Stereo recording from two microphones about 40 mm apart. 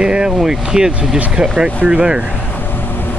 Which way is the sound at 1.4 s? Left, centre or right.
Right.